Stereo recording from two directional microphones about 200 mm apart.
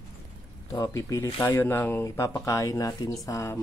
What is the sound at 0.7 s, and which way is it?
Speech, 15° left (ahead or behind).